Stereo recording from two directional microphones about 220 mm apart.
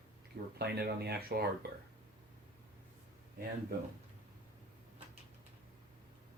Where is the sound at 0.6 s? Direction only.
45° right (ahead or behind).